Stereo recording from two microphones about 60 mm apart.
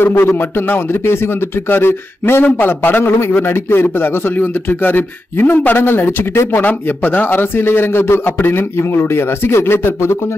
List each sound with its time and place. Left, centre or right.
0.0 s a man's voice: left
1.7 s a man's voice: left